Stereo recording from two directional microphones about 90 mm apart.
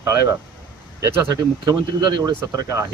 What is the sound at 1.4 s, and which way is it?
Speech, 45° right (ahead or behind).